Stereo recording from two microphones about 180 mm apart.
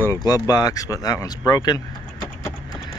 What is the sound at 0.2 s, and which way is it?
Speech, 20° left (ahead or behind).